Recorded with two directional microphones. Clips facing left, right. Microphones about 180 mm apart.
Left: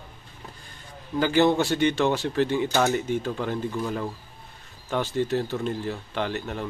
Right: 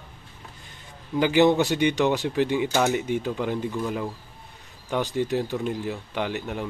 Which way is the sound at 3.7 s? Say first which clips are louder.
Right 1 dB; centre (ahead or behind).